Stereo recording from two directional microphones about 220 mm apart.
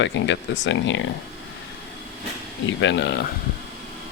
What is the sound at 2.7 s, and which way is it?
Speech, 55° left (ahead or behind).